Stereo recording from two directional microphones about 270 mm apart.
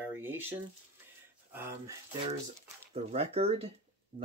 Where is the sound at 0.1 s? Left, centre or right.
Centre.